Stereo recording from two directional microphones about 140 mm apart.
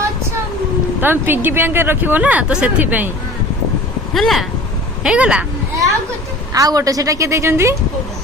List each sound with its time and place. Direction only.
1.0 s speech: 15° right (ahead or behind)
4.1 s speech: centre (ahead or behind)
6.5 s a woman's voice: 25° right (ahead or behind)